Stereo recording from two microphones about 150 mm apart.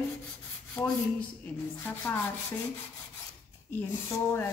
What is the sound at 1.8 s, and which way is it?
Speech, 15° left (ahead or behind).